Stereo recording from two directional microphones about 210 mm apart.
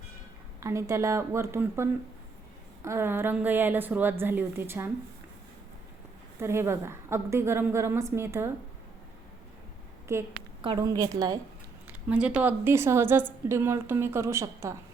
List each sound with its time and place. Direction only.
0.6 s a woman's voice: 15° right (ahead or behind)
6.4 s a woman's voice: 10° right (ahead or behind)
10.1 s a woman's voice: 10° right (ahead or behind)
11.9 s a woman's voice: 5° right (ahead or behind)